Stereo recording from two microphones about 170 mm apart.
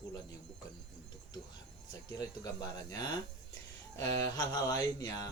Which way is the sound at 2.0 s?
25° left (ahead or behind).